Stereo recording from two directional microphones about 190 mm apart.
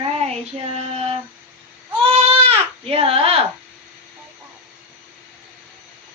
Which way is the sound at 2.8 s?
30° right (ahead or behind).